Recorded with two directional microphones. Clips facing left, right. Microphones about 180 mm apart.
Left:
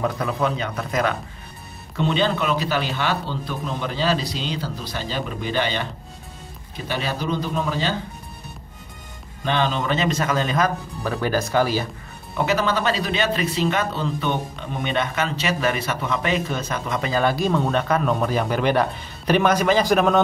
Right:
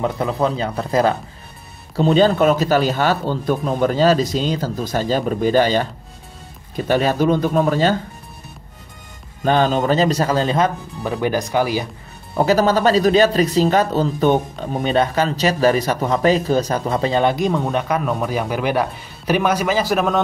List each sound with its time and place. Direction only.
0.0 s a man's voice: 25° right (ahead or behind); by 7.9 s 50° right (ahead or behind)
9.4 s speech: 40° right (ahead or behind)
11.0 s speech: 15° right (ahead or behind)
12.4 s speech: 40° right (ahead or behind); by 20.2 s 5° right (ahead or behind)